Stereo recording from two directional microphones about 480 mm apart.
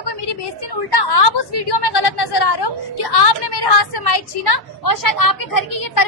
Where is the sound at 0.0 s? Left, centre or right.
Left.